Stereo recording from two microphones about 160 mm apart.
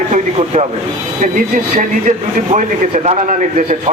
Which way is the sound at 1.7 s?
45° right (ahead or behind).